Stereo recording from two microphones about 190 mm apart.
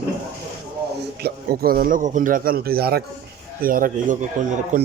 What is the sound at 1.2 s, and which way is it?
A man's voice, 50° right (ahead or behind).